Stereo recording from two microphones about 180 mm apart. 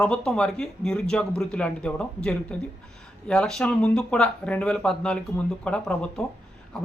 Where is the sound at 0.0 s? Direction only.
5° left (ahead or behind).